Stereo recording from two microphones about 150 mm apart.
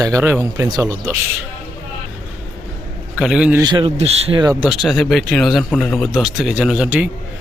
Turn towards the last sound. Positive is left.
turn(degrees=-10)  # may be behind; listen again after turning